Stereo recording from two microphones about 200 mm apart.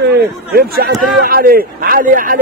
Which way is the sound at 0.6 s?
50° right (ahead or behind).